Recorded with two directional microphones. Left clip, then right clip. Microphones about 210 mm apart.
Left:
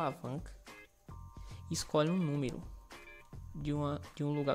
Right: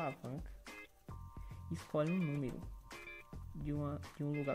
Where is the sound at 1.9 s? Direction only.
40° left (ahead or behind).